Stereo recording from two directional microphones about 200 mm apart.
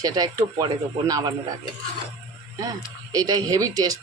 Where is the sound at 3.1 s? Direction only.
20° right (ahead or behind).